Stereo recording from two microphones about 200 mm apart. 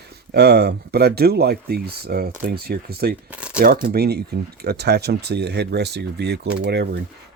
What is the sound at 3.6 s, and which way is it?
Speech, 45° right (ahead or behind).